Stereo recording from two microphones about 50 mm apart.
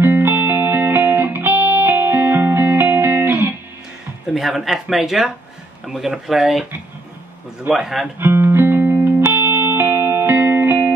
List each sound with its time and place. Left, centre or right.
0.0 s music: right
4.3 s speech: centre
7.7 s speech: right
8.2 s music: right